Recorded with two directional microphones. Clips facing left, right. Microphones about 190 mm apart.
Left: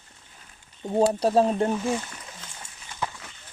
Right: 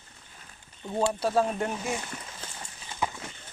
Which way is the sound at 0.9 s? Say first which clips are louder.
Left 5 dB; 35° left (ahead or behind).